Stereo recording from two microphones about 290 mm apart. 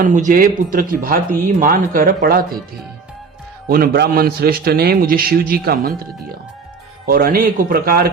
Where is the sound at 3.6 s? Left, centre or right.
Right.